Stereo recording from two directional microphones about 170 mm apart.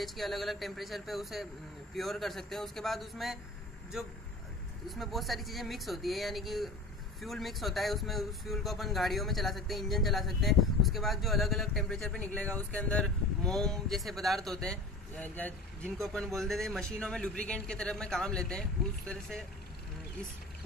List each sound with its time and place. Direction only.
0.0 s speech: centre (ahead or behind)
4.8 s speech: centre (ahead or behind)